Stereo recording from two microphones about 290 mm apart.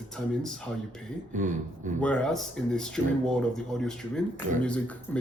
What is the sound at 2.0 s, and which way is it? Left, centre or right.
Speech, centre.